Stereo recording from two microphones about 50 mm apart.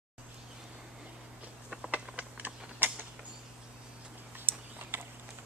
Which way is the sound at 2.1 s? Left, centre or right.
Right.